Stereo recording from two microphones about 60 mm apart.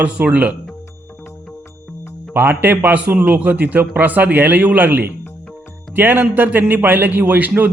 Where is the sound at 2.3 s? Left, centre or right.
Right.